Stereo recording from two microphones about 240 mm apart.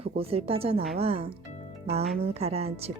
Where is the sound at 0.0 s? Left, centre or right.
Right.